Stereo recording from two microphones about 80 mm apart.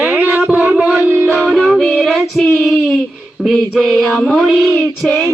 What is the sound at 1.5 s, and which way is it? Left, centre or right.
Music, centre.